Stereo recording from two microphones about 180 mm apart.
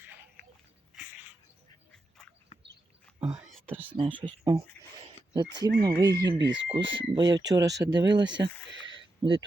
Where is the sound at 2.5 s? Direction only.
35° left (ahead or behind).